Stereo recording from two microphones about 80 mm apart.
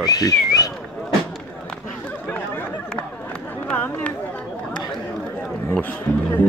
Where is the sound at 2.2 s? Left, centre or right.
Left.